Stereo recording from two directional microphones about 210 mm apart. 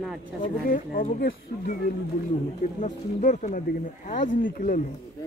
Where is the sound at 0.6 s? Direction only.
40° left (ahead or behind).